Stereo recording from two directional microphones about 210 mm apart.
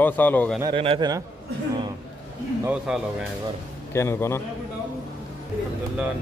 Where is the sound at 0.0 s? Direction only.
10° left (ahead or behind).